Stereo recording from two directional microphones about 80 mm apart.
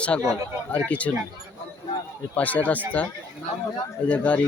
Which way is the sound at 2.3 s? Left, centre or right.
Centre.